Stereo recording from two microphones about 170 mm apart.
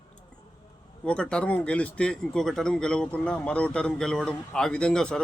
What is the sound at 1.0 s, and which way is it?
A man's voice, 5° left (ahead or behind).